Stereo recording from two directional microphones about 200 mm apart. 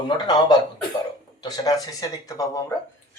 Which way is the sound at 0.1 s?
20° left (ahead or behind).